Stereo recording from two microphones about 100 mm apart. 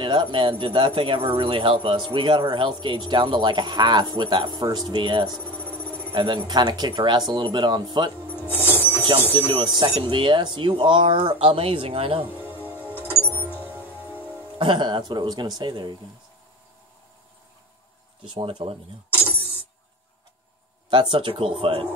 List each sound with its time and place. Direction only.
0.0 s speech: 55° right (ahead or behind)
8.6 s music: 20° right (ahead or behind)
9.3 s speech: 55° right (ahead or behind)
9.7 s speech: 45° right (ahead or behind)
10.0 s speech: 55° right (ahead or behind)
12.6 s music: 15° right (ahead or behind)
14.6 s speech: 50° right (ahead or behind)
18.3 s speech: 60° right (ahead or behind)
20.9 s speech: 55° right (ahead or behind)